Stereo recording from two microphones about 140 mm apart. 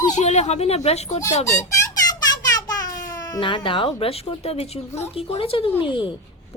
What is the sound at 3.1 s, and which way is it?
A woman's voice, 25° left (ahead or behind).